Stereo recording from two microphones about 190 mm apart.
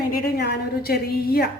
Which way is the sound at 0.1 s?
55° left (ahead or behind).